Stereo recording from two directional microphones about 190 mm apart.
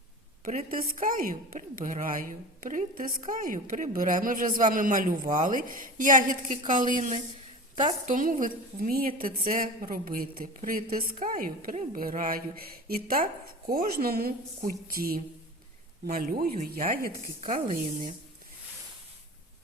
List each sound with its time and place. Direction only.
0.4 s a woman's voice: 45° right (ahead or behind)